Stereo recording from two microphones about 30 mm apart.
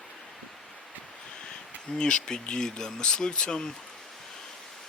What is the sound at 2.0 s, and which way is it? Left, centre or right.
Speech, left.